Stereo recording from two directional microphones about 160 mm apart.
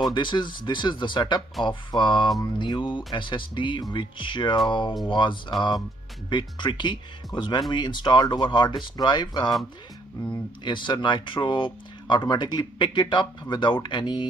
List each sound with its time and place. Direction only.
0.1 s speech: 30° left (ahead or behind)